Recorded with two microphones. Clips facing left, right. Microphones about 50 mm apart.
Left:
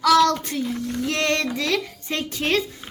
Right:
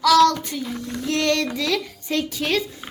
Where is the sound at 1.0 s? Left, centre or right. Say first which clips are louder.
Right 2 dB; left.